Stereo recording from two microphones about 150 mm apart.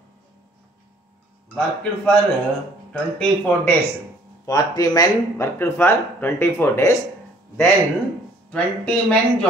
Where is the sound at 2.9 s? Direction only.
10° left (ahead or behind).